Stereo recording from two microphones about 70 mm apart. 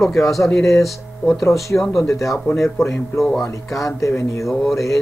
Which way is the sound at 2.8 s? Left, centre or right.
Left.